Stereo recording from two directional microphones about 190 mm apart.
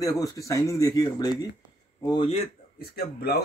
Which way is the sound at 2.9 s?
55° left (ahead or behind).